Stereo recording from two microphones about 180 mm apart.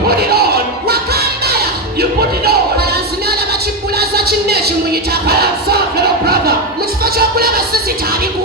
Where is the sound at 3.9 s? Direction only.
60° right (ahead or behind).